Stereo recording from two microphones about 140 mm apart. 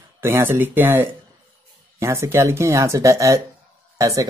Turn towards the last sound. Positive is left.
turn(degrees=-25)  # may be behind; listen again after turning